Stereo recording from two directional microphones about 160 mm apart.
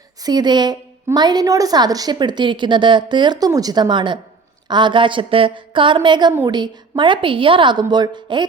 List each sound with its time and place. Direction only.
0.2 s a woman's voice: 25° right (ahead or behind)